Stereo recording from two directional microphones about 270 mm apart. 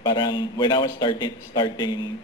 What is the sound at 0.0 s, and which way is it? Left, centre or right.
Speech, centre.